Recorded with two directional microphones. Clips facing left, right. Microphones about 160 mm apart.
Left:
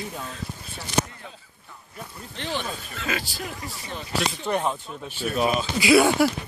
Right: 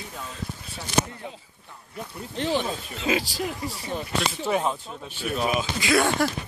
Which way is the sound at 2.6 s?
25° right (ahead or behind).